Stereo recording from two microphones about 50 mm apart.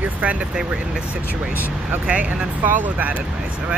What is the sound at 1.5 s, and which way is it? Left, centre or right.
Speech, right.